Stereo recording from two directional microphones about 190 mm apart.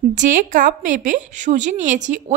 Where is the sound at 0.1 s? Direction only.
45° right (ahead or behind).